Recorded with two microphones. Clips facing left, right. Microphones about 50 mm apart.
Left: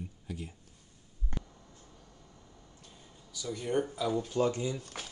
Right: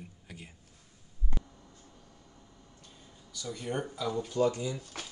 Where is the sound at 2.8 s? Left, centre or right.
Centre.